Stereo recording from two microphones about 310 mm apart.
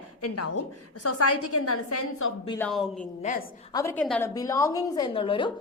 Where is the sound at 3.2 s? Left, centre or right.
Left.